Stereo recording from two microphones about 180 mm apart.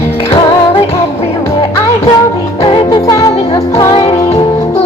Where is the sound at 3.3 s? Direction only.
30° left (ahead or behind).